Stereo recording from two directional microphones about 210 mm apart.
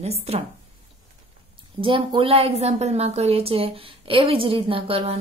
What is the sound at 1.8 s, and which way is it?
A woman's voice, 25° right (ahead or behind).